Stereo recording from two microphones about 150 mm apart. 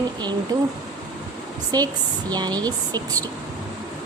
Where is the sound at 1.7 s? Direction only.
25° right (ahead or behind).